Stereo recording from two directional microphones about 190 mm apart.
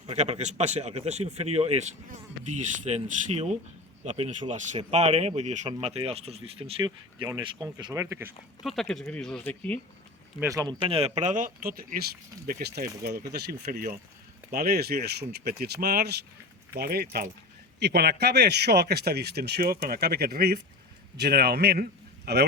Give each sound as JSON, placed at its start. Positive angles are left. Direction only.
{"t": 0.1, "sound": "speech", "side_deg": -35}
{"t": 8.6, "sound": "speech", "side_deg": 0}
{"t": 10.4, "sound": "speech", "side_deg": -15}